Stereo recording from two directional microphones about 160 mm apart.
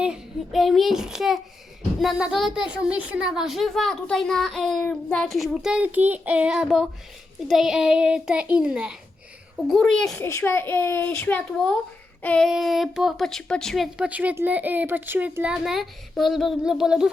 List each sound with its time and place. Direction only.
0.0 s a woman's voice: centre (ahead or behind)
10.2 s a child's voice: 15° left (ahead or behind); by 17.1 s 5° right (ahead or behind)